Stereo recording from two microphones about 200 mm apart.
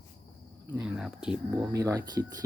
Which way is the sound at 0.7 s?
5° right (ahead or behind).